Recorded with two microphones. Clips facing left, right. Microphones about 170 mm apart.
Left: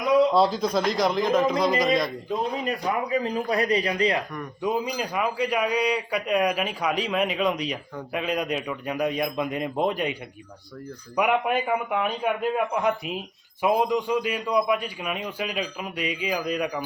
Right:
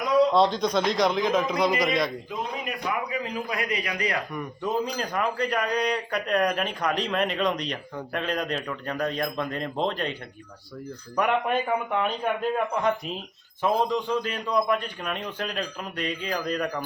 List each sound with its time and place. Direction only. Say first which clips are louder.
0.3 s a man's voice: even; 5° left (ahead or behind)
2.3 s a man's voice: left 5 dB; 35° left (ahead or behind)
4.6 s a man's voice: left 2 dB; 10° left (ahead or behind)
11.2 s a man's voice: left 1 dB; 5° left (ahead or behind)